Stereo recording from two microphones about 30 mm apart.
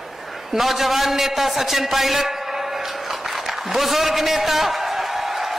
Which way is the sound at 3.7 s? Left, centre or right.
Centre.